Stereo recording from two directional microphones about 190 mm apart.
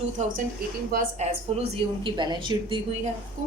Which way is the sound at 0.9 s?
50° right (ahead or behind).